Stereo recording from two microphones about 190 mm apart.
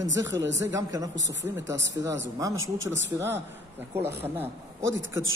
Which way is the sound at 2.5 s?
90° right.